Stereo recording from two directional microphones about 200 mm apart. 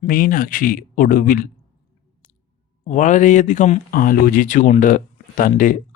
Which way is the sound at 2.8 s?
40° left (ahead or behind).